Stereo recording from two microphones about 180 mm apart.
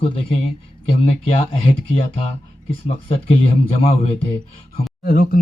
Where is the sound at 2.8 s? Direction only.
35° left (ahead or behind).